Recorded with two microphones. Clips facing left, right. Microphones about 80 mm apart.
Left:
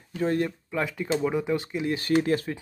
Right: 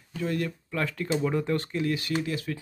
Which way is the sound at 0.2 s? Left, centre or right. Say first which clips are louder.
Left 4 dB; left.